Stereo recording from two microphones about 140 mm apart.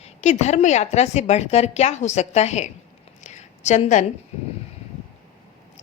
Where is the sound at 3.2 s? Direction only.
55° left (ahead or behind).